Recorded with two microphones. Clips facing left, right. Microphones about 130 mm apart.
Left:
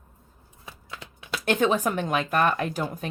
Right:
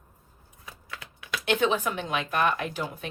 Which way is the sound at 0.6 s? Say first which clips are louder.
Left 1 dB; 25° left (ahead or behind).